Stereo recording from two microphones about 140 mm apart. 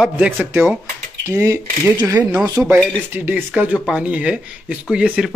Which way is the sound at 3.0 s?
15° right (ahead or behind).